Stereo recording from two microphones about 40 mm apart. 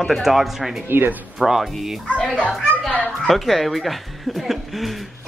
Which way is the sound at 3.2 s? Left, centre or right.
Centre.